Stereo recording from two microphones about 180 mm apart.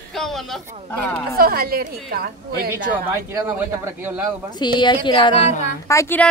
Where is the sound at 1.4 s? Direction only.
55° right (ahead or behind).